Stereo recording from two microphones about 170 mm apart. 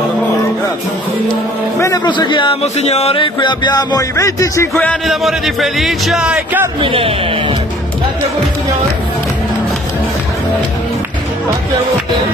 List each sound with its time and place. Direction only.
1.8 s speech: 25° left (ahead or behind)
4.7 s speech: centre (ahead or behind)
6.8 s speech: 30° right (ahead or behind)